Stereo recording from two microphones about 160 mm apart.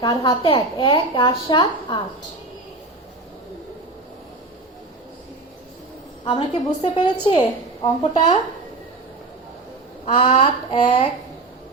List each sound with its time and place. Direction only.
0.0 s a woman's voice: 25° left (ahead or behind)
6.2 s a woman's voice: 30° left (ahead or behind)
10.1 s a woman's voice: 30° left (ahead or behind)